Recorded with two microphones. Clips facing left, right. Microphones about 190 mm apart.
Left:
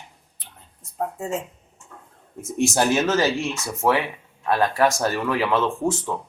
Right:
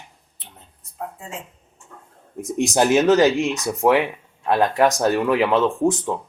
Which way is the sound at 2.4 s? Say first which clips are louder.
Right 2 dB; 15° right (ahead or behind).